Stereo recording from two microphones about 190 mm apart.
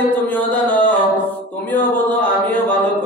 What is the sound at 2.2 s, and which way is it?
Mantra, 5° left (ahead or behind).